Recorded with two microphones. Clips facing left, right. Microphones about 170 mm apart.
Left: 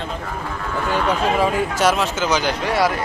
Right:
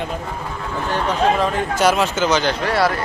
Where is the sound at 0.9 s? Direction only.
10° left (ahead or behind).